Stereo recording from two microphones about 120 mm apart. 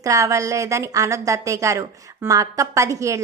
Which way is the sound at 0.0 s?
25° right (ahead or behind).